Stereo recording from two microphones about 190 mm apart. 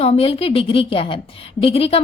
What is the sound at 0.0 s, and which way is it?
A woman's voice, 30° left (ahead or behind).